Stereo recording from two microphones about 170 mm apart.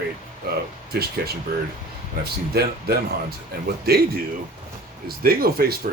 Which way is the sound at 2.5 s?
65° right (ahead or behind).